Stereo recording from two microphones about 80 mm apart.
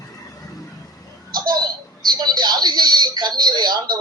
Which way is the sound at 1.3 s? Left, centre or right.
Right.